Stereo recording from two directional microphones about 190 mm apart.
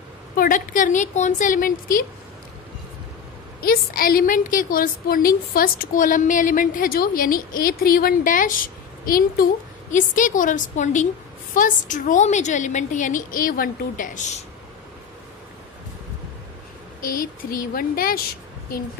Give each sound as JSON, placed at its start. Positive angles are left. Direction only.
{"t": 0.4, "sound": "a woman's voice", "side_deg": 45}
{"t": 3.6, "sound": "a woman's voice", "side_deg": 50}
{"t": 17.0, "sound": "a woman's voice", "side_deg": 50}